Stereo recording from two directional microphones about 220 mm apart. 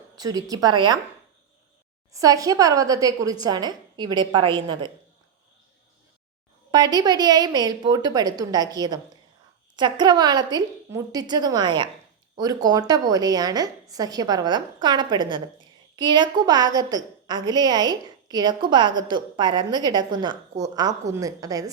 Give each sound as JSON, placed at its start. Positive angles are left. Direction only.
{"t": 0.2, "sound": "a woman's voice", "side_deg": -15}
{"t": 2.1, "sound": "a woman's voice", "side_deg": -15}
{"t": 6.7, "sound": "a woman's voice", "side_deg": -20}